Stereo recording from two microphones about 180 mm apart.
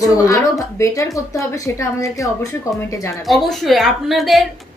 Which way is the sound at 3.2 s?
Centre (ahead or behind).